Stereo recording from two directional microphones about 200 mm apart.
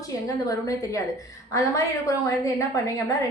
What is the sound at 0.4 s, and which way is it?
A woman's voice, 15° left (ahead or behind).